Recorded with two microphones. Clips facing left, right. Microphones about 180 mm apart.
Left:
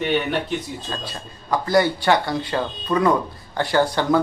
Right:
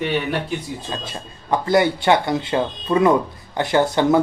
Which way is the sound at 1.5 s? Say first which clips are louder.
Right 1 dB; 20° right (ahead or behind).